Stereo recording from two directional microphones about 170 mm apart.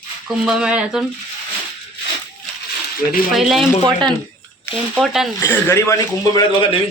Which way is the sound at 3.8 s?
25° right (ahead or behind).